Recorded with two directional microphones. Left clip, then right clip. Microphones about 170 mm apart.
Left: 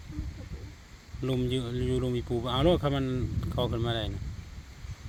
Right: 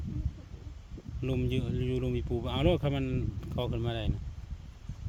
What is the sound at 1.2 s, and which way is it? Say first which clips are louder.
Speech: left 3 dB; 5° left (ahead or behind).